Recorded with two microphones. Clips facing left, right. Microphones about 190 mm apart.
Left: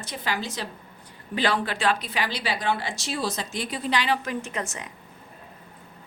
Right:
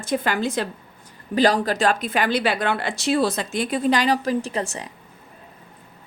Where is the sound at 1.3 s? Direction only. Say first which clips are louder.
Right 7 dB; 40° right (ahead or behind).